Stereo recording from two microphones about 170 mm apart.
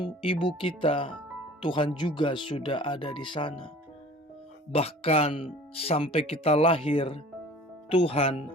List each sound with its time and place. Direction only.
0.0 s speech: 30° left (ahead or behind)
4.7 s speech: 35° left (ahead or behind)